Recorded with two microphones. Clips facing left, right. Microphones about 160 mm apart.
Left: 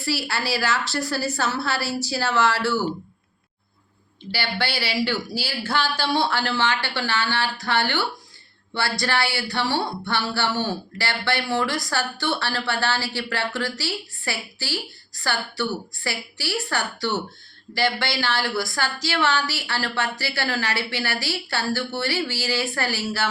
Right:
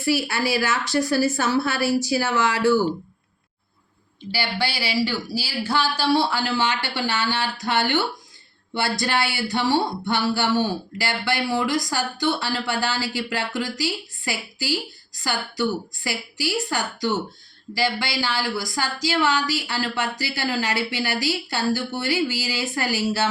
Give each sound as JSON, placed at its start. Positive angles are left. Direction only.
{"t": 0.0, "sound": "a woman's voice", "side_deg": -20}
{"t": 4.3, "sound": "speech", "side_deg": -15}